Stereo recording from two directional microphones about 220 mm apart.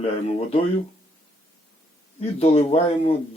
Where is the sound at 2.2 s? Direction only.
30° left (ahead or behind).